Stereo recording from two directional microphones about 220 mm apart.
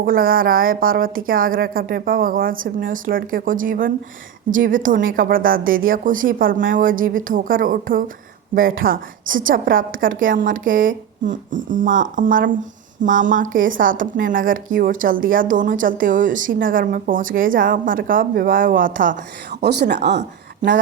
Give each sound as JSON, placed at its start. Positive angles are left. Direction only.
{"t": 0.0, "sound": "a woman's voice", "side_deg": -40}
{"t": 9.2, "sound": "a woman's voice", "side_deg": -60}
{"t": 9.5, "sound": "a woman's voice", "side_deg": -40}